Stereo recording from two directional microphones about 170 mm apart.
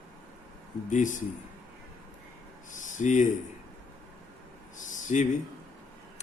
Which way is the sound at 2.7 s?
45° left (ahead or behind).